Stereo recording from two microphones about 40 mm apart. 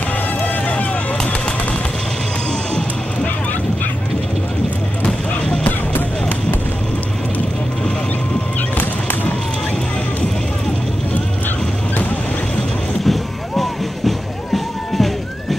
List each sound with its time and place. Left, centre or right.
5.0 s music: left
5.7 s music: left
13.0 s music: centre